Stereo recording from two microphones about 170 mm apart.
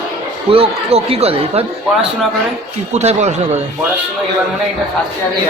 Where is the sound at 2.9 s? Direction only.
40° right (ahead or behind).